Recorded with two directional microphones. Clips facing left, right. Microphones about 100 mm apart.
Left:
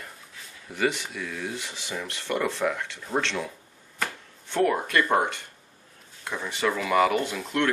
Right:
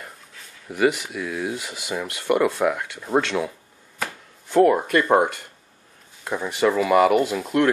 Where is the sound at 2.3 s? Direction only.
60° right (ahead or behind).